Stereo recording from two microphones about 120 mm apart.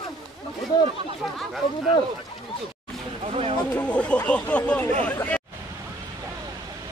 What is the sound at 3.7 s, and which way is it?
Speech, 10° left (ahead or behind).